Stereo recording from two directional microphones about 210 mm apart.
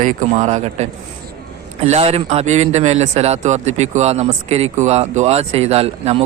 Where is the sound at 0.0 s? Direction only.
40° right (ahead or behind).